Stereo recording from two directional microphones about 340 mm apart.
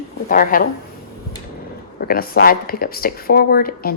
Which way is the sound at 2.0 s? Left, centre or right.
Left.